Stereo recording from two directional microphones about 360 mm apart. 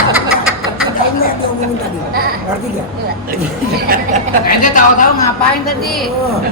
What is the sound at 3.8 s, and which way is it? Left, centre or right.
Speech, right.